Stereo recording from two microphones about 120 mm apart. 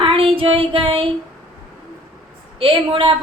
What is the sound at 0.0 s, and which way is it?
Child singing, 50° right (ahead or behind).